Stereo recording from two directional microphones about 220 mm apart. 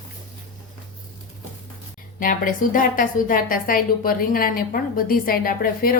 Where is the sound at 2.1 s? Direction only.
40° left (ahead or behind).